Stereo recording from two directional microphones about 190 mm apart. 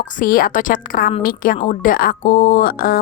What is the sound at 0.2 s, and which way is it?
Speech, 50° left (ahead or behind).